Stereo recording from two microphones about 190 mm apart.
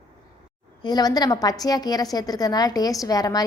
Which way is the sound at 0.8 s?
20° left (ahead or behind).